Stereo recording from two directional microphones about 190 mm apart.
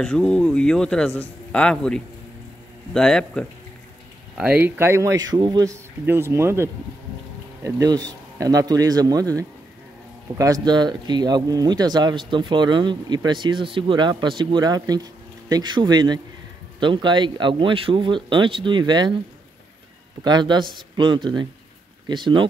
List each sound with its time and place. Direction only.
0.0 s a man's voice: 5° left (ahead or behind)
4.4 s speech: 5° right (ahead or behind)
10.3 s speech: 20° right (ahead or behind)
20.2 s speech: 25° right (ahead or behind)